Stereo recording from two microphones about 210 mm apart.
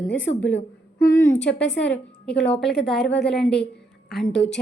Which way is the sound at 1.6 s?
55° left (ahead or behind).